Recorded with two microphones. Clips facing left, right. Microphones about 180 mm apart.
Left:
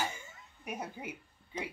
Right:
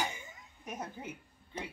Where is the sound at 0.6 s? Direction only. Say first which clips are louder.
Left 1 dB; 10° left (ahead or behind).